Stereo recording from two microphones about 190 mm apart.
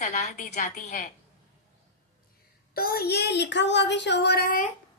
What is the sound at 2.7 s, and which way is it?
A woman's voice, 55° left (ahead or behind).